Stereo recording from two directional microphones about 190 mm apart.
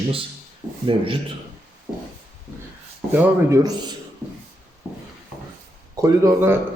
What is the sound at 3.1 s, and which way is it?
Speech, 15° right (ahead or behind).